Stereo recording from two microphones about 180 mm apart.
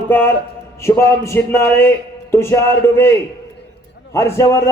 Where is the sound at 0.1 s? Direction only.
10° left (ahead or behind).